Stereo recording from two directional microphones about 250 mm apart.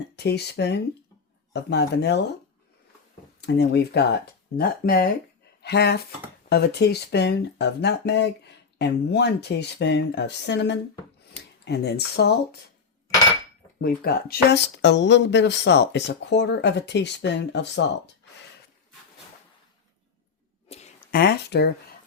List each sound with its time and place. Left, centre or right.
0.2 s speech: left
3.4 s speech: left
13.8 s speech: left
20.7 s a sound: left
21.2 s speech: left